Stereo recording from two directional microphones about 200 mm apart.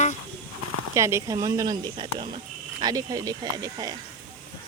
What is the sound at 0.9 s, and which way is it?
Speech, 15° right (ahead or behind).